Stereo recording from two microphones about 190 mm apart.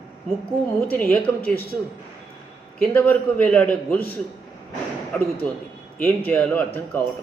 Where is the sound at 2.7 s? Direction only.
5° left (ahead or behind).